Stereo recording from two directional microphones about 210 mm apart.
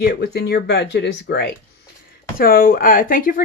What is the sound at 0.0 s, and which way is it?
Speech, 50° left (ahead or behind).